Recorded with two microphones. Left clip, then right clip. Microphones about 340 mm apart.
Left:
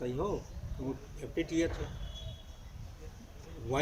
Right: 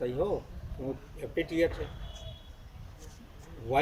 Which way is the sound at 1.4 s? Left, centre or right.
Centre.